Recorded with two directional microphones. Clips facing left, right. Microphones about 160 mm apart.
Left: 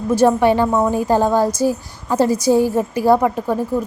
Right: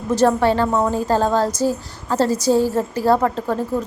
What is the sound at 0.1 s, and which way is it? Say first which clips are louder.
A woman's voice: left 2 dB; 10° left (ahead or behind).